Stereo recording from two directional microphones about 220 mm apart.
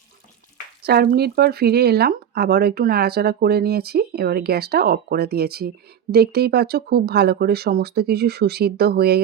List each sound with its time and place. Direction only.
0.8 s speech: 45° right (ahead or behind)